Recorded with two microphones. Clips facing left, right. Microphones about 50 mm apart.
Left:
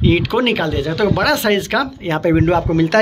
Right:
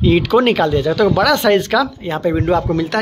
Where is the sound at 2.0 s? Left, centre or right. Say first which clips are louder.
Left 1 dB; left.